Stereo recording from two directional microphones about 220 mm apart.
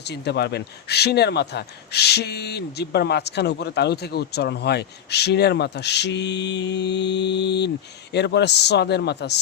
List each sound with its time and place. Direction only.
0.1 s speech: 50° left (ahead or behind)